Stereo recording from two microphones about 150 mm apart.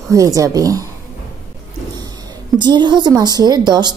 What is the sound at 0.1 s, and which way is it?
Speech, 20° right (ahead or behind).